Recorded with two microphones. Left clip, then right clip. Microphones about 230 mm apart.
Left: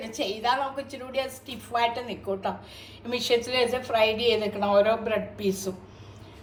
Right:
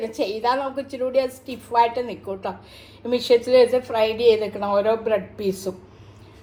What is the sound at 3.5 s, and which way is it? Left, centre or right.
Speech, centre.